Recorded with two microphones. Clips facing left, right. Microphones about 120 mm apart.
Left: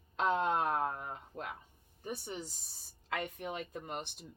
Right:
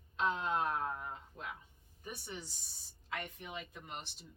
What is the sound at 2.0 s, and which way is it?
Speech, 40° left (ahead or behind).